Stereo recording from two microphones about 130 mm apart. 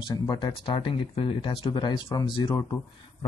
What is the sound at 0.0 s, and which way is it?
Speech, 35° left (ahead or behind).